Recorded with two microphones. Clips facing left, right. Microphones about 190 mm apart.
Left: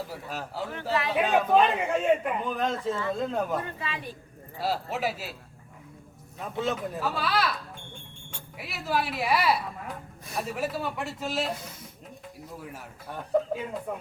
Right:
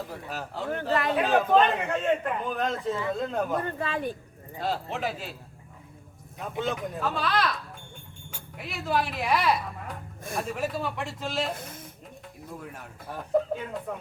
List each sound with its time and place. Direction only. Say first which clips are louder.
0.1 s a man's voice: even; centre (ahead or behind)
0.7 s a man's voice: right 3 dB; 50° right (ahead or behind)
1.1 s a man's voice: even; centre (ahead or behind)
3.8 s a man's voice: right 6 dB; 50° right (ahead or behind)
4.6 s a man's voice: left 1 dB; 5° left (ahead or behind)
6.6 s a man's voice: left 1 dB; centre (ahead or behind)
8.5 s a man's voice: right 1 dB; 5° left (ahead or behind)
11.5 s speech: right 1 dB; 50° right (ahead or behind)
12.5 s a man's voice: even; 5° left (ahead or behind)